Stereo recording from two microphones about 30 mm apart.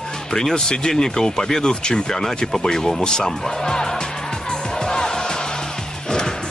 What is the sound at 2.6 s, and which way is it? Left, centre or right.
Music, centre.